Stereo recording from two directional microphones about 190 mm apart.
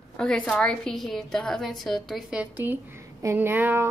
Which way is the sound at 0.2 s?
5° left (ahead or behind).